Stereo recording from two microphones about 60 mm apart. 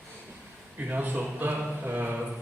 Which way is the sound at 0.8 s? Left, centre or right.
Right.